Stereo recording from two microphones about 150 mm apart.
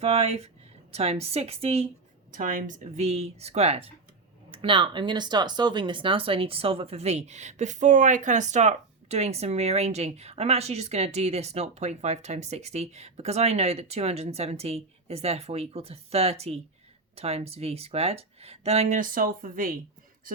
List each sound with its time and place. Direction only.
0.0 s speech: 45° right (ahead or behind)
2.3 s speech: 60° right (ahead or behind); by 18.9 s 45° right (ahead or behind)
18.9 s speech: 65° right (ahead or behind)